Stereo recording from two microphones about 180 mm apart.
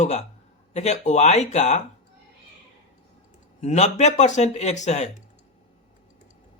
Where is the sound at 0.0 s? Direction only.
40° left (ahead or behind).